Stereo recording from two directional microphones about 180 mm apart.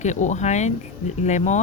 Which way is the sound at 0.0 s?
40° left (ahead or behind).